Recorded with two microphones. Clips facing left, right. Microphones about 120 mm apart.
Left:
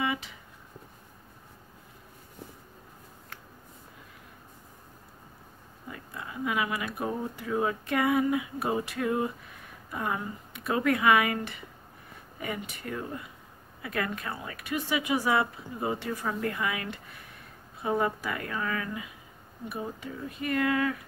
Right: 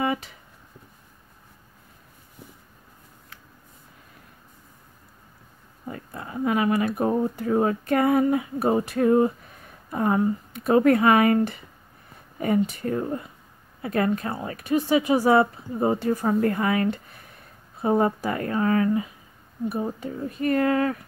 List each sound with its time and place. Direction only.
0.0 s speech: 45° right (ahead or behind)
5.9 s speech: 40° right (ahead or behind)